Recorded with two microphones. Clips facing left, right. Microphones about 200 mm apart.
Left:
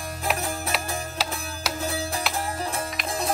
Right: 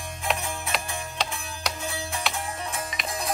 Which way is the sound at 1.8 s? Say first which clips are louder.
Left 4 dB; 35° left (ahead or behind).